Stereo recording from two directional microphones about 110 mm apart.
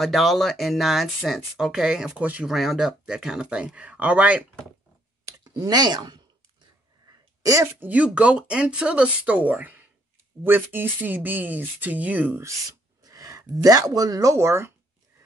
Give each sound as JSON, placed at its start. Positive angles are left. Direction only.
{"t": 0.0, "sound": "speech", "side_deg": 0}
{"t": 2.5, "sound": "speech", "side_deg": 0}
{"t": 5.2, "sound": "clicking", "side_deg": -35}
{"t": 7.1, "sound": "speech", "side_deg": -30}